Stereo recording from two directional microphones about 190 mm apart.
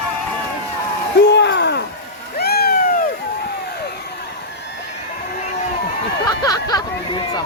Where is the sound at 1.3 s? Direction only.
65° left (ahead or behind).